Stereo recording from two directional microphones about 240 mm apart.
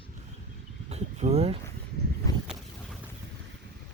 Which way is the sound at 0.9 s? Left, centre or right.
Right.